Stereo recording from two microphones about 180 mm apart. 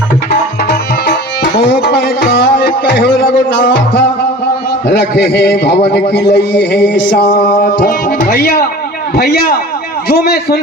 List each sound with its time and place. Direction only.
1.6 s music: 65° left (ahead or behind)
3.0 s a man's voice: 55° left (ahead or behind)
4.9 s a man's voice: 65° left (ahead or behind)